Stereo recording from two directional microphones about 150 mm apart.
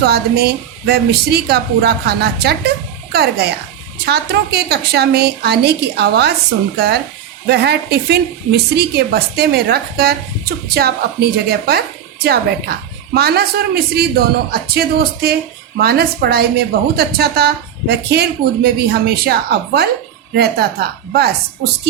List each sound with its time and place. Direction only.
0.0 s a woman's voice: 90° right